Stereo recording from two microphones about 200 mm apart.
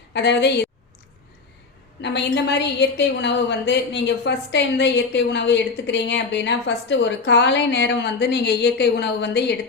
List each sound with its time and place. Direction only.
0.1 s a woman's voice: 60° left (ahead or behind)
2.0 s a woman's voice: 60° left (ahead or behind)